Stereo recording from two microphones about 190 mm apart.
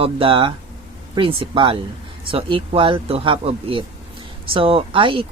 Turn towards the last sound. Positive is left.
turn(degrees=-25)  # may be behind; listen again after turning